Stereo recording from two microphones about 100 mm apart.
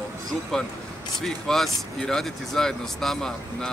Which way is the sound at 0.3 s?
5° left (ahead or behind).